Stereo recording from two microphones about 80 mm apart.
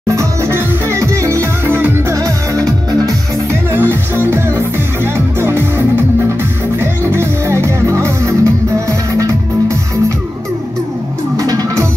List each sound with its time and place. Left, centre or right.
0.1 s music: right
2.1 s music: right
3.7 s music: right
11.3 s music: right